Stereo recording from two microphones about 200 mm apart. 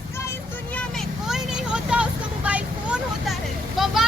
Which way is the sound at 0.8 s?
Centre (ahead or behind).